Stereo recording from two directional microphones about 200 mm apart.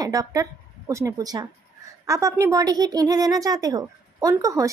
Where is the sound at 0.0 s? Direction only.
15° right (ahead or behind).